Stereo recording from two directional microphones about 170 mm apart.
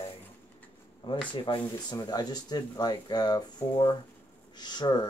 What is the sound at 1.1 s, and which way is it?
Speech, 30° left (ahead or behind).